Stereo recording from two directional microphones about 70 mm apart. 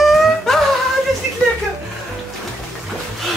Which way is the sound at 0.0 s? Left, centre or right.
Centre.